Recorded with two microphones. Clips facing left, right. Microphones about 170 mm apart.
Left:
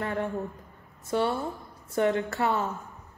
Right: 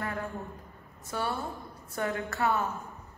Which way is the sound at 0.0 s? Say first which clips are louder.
Left 5 dB; 25° left (ahead or behind).